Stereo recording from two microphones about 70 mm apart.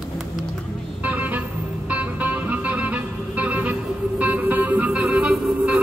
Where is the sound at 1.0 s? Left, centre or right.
Right.